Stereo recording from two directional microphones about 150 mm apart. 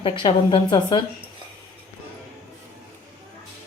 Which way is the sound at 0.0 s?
35° left (ahead or behind).